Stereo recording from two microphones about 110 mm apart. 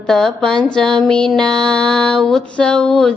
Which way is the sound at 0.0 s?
5° left (ahead or behind).